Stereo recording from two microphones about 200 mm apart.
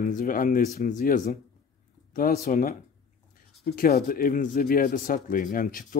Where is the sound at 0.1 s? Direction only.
45° left (ahead or behind).